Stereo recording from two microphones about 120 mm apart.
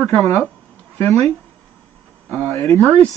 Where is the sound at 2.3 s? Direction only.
15° left (ahead or behind).